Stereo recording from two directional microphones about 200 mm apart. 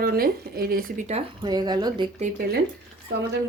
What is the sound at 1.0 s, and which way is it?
Speech, 25° right (ahead or behind).